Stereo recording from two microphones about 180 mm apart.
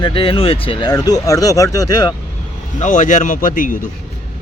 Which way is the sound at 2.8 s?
45° left (ahead or behind).